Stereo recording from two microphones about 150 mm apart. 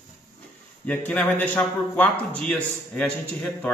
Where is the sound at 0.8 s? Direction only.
10° left (ahead or behind).